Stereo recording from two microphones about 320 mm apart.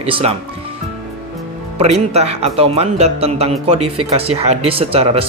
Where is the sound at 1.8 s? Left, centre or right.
Centre.